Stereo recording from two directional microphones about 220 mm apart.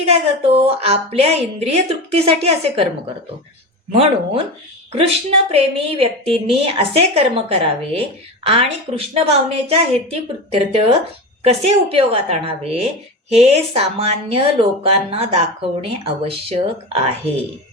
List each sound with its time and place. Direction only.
0.1 s a woman's voice: 25° right (ahead or behind)
3.9 s a woman's voice: 25° right (ahead or behind)